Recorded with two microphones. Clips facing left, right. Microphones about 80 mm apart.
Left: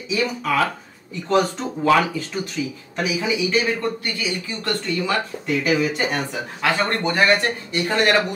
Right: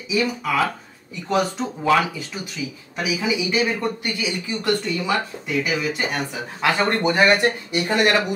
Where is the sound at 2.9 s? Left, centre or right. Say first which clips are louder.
Left 1 dB; centre.